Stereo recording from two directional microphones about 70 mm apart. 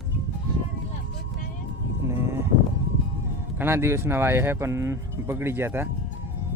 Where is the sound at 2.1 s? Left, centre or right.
Right.